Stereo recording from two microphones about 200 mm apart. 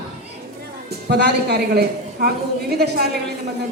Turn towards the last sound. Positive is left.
turn(degrees=-55)  # may be behind; listen again after turning